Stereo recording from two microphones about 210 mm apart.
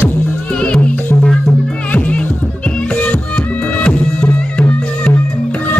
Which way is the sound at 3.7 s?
5° left (ahead or behind).